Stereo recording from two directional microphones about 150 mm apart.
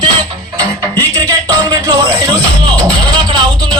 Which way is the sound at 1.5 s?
25° right (ahead or behind).